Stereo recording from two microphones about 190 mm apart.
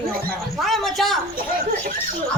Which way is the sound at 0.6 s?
Centre (ahead or behind).